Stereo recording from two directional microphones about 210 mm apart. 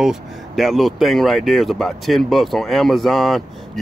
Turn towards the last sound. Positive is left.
turn(degrees=0)  # may be behind; listen again after turning